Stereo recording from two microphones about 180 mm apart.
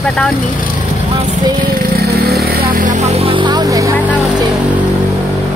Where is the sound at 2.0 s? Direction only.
60° right (ahead or behind); by 3.9 s 20° right (ahead or behind).